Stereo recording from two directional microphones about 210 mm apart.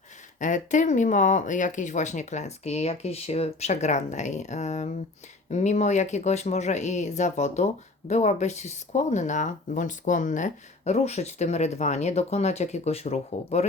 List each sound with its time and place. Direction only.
0.3 s speech: 35° left (ahead or behind)